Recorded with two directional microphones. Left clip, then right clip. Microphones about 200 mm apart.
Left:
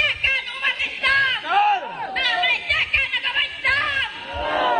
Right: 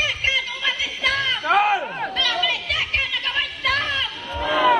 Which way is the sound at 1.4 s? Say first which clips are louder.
Right 4 dB; 25° right (ahead or behind).